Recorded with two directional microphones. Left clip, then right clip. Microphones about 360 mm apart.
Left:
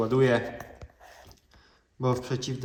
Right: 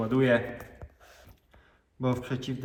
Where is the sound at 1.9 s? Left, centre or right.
Centre.